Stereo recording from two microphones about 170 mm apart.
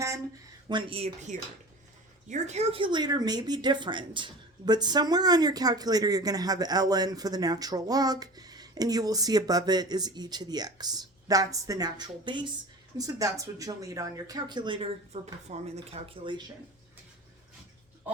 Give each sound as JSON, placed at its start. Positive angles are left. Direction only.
{"t": 0.7, "sound": "a woman's voice", "side_deg": -30}